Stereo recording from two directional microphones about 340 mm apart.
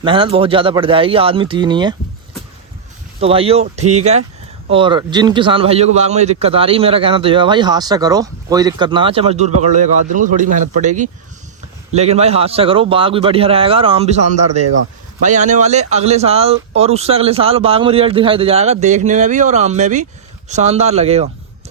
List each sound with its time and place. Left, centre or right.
0.0 s a man's voice: centre
3.2 s a man's voice: centre